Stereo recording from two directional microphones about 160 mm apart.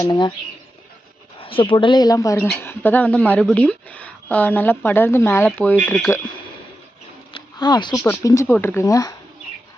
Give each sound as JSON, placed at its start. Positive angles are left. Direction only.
{"t": 0.0, "sound": "speech", "side_deg": 25}
{"t": 1.4, "sound": "a woman's voice", "side_deg": 35}
{"t": 7.3, "sound": "a woman's voice", "side_deg": 30}